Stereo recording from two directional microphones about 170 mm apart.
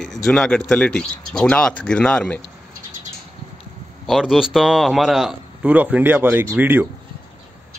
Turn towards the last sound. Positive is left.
turn(degrees=-10)  # may be behind; listen again after turning